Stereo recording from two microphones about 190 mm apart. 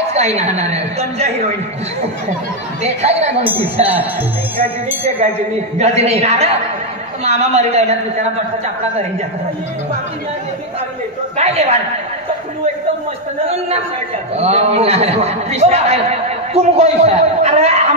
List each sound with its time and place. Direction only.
0.1 s a man's voice: 35° right (ahead or behind)
2.8 s a man's voice: 35° right (ahead or behind)
5.8 s a man's voice: 35° right (ahead or behind)
11.3 s a man's voice: 35° right (ahead or behind)
14.3 s a man's voice: 35° right (ahead or behind)